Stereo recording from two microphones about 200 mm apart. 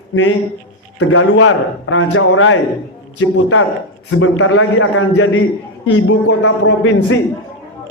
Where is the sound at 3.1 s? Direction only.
80° left.